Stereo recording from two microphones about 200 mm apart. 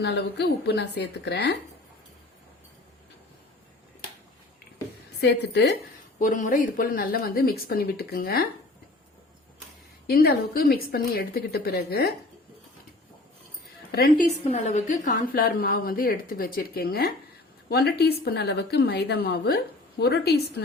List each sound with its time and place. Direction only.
0.0 s a woman's voice: 55° left (ahead or behind)
5.2 s a woman's voice: 60° left (ahead or behind)
6.1 s a woman's voice: 40° left (ahead or behind)
10.1 s a woman's voice: 50° left (ahead or behind)
13.9 s a woman's voice: 50° left (ahead or behind)
14.5 s a woman's voice: 35° left (ahead or behind); by 20.7 s 55° left (ahead or behind)